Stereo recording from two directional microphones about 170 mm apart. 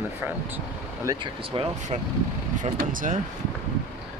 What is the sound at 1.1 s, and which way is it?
Speech, 20° right (ahead or behind).